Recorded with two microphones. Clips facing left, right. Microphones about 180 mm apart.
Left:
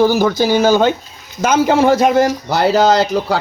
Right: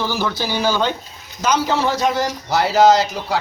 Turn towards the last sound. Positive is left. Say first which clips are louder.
# left 2 dB
turn(degrees=65)  # may be behind; listen again after turning